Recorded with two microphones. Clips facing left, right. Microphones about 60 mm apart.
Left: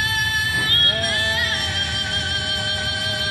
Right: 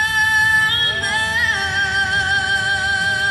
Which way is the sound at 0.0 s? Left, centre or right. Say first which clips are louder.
Right 6 dB; right.